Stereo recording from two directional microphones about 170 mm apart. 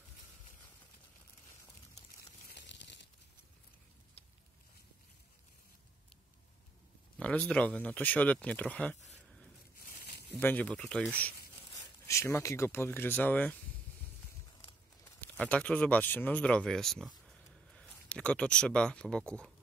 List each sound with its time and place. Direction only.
2.5 s tearing: 90° left
7.2 s speech: 5° left (ahead or behind)
8.9 s speech: 45° left (ahead or behind)
10.3 s speech: 10° left (ahead or behind)
15.1 s speech: 10° left (ahead or behind)